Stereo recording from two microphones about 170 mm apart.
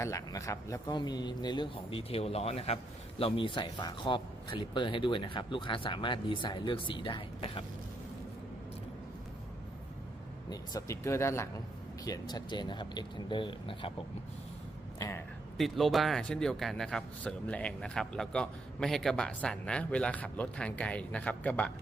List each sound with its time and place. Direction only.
0.0 s speech: 15° left (ahead or behind)
10.5 s speech: 20° left (ahead or behind)
14.9 s speech: 20° left (ahead or behind)
15.5 s a man's voice: centre (ahead or behind)